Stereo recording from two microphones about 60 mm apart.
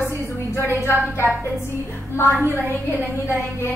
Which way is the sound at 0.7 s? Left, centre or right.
Left.